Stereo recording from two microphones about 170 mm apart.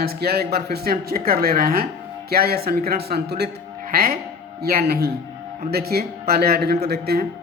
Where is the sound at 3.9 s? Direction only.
60° right (ahead or behind).